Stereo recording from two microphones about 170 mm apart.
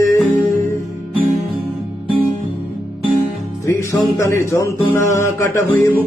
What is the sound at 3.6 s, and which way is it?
Music, 15° left (ahead or behind).